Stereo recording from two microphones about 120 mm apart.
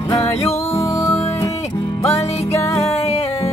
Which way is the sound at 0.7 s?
25° left (ahead or behind).